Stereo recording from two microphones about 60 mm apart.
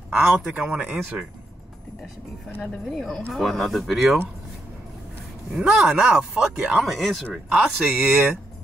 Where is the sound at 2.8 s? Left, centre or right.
Centre.